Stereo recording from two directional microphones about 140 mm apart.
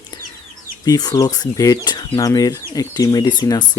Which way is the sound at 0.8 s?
30° left (ahead or behind).